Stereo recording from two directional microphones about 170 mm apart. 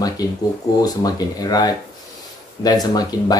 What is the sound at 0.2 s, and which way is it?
Speech, 20° left (ahead or behind).